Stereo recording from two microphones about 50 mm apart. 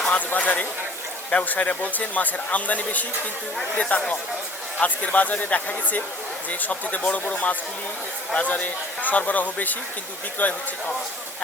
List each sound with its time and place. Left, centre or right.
0.3 s speech: left